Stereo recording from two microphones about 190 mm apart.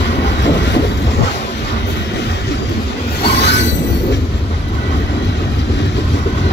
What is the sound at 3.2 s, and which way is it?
Train, 60° left (ahead or behind).